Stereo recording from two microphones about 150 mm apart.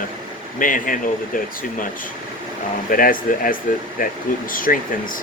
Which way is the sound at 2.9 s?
65° left (ahead or behind).